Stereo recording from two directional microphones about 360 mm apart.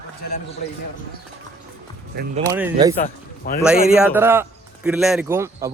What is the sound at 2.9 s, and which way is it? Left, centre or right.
Speech, left.